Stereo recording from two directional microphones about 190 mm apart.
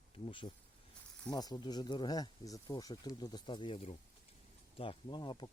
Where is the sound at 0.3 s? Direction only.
25° left (ahead or behind).